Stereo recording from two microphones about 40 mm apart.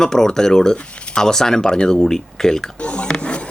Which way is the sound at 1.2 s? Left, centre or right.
Centre.